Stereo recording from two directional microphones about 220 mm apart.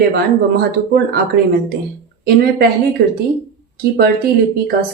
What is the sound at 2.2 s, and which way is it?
Speech, 45° right (ahead or behind).